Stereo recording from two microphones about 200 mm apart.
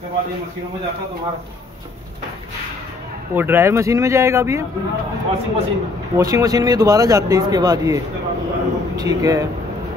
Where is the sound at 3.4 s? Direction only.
10° right (ahead or behind).